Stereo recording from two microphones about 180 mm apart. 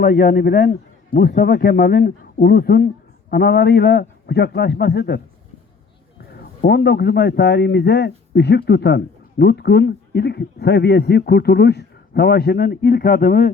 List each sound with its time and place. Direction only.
0.0 s speech: 50° left (ahead or behind)
6.3 s a man's voice: 60° left (ahead or behind)